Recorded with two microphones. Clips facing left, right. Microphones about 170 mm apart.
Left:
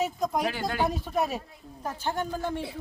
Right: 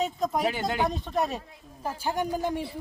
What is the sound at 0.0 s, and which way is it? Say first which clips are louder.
Speech: even; centre (ahead or behind).